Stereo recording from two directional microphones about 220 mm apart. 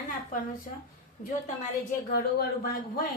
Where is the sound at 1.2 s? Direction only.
40° left (ahead or behind).